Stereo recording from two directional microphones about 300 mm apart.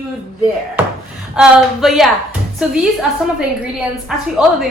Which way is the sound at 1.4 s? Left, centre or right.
Centre.